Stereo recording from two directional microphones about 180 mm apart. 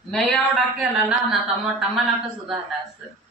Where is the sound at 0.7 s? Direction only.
Centre (ahead or behind).